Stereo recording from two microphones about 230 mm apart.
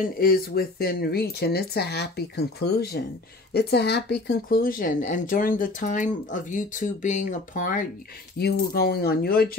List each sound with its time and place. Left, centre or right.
0.2 s speech: left